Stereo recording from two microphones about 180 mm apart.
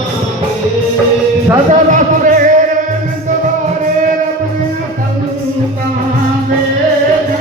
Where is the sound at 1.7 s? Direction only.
45° right (ahead or behind).